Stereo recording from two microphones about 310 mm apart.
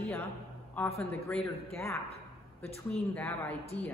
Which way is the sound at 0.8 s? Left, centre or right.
Centre.